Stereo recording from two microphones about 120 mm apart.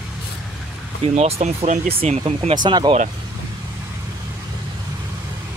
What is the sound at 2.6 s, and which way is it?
Speech, 40° right (ahead or behind).